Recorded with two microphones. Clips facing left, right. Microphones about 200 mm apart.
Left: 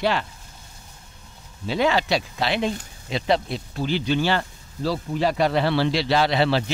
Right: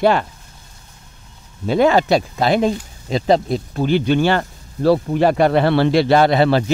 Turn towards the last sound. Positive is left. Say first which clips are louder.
# right 6 dB
turn(degrees=-50)  # may be behind; listen again after turning